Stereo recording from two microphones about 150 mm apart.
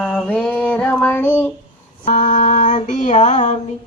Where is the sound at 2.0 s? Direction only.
60° left (ahead or behind).